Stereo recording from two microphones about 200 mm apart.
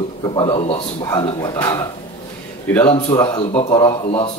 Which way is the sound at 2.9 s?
20° left (ahead or behind).